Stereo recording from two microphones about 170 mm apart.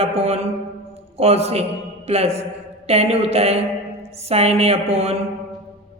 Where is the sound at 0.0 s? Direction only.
40° right (ahead or behind).